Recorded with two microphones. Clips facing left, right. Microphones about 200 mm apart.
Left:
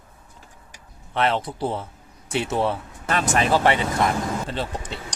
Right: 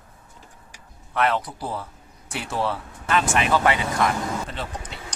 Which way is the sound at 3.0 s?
40° left (ahead or behind).